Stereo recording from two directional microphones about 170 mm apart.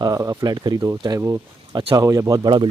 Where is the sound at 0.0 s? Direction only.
20° right (ahead or behind).